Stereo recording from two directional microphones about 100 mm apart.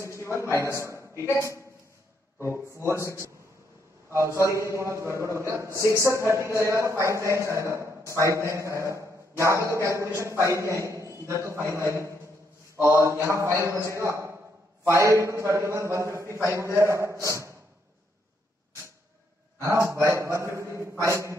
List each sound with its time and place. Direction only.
0.2 s a man's voice: 30° left (ahead or behind)
2.3 s a man's voice: 25° right (ahead or behind)
4.1 s a man's voice: 30° right (ahead or behind)
19.6 s a man's voice: 30° right (ahead or behind)